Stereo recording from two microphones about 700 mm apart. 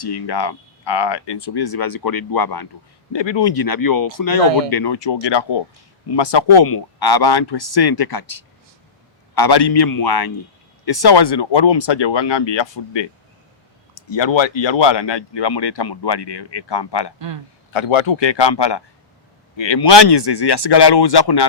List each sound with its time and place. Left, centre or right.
0.0 s speech: left
14.1 s speech: left